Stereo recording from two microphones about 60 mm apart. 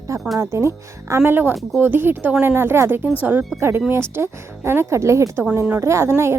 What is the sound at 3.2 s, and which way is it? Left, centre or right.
Speech, right.